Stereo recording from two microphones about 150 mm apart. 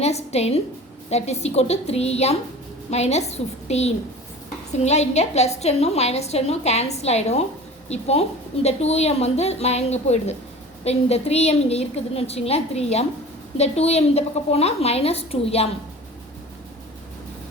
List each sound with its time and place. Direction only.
0.0 s a woman's voice: 45° left (ahead or behind)